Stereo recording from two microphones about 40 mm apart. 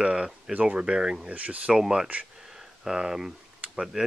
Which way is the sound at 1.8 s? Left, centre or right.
Centre.